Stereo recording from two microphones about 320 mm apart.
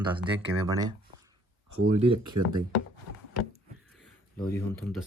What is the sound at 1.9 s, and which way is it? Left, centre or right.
Speech, centre.